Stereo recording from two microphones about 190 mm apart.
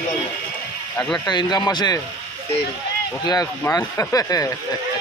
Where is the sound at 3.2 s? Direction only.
20° left (ahead or behind).